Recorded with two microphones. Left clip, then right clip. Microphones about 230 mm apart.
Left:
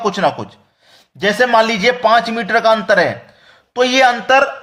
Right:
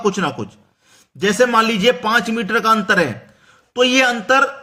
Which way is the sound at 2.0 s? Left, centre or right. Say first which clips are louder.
Left 5 dB; centre.